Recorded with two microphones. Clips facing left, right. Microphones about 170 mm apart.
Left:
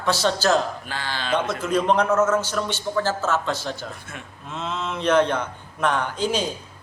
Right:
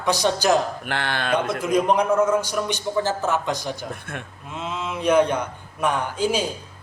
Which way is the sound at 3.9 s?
60° right (ahead or behind).